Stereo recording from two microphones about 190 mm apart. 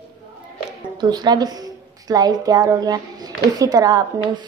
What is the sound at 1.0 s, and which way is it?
A woman's voice, 20° right (ahead or behind).